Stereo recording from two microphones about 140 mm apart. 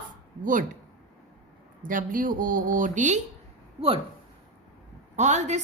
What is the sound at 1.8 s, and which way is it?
A woman's voice, 75° right (ahead or behind).